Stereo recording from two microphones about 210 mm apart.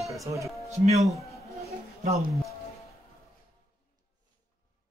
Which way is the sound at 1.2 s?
15° left (ahead or behind).